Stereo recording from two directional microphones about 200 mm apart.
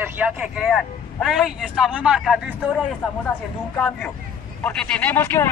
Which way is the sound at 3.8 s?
5° left (ahead or behind).